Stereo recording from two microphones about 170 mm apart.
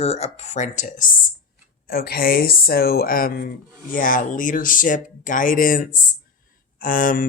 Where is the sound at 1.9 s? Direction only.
60° left (ahead or behind).